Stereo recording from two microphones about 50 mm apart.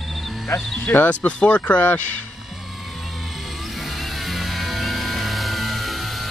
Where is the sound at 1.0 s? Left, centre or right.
Left.